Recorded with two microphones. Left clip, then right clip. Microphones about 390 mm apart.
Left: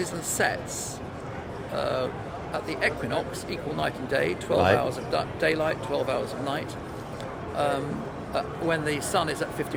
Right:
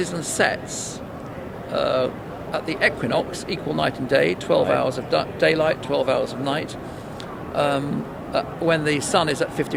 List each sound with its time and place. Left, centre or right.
0.0 s speech: right
1.7 s speech: right